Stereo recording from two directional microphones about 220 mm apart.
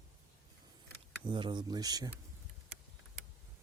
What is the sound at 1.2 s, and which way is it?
Speech, 20° right (ahead or behind).